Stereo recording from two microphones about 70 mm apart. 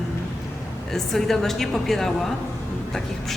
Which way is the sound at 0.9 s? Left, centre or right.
Centre.